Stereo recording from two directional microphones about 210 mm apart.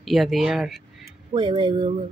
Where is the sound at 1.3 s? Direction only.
25° right (ahead or behind).